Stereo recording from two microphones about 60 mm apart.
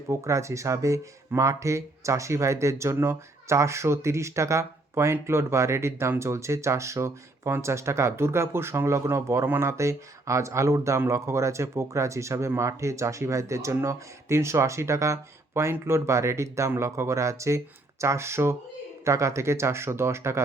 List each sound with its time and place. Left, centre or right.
0.1 s speech: right